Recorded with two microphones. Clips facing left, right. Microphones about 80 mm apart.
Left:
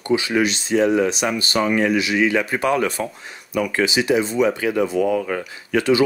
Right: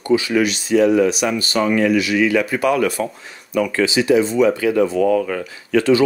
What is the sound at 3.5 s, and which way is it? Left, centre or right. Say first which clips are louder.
Speech: right 2 dB; centre.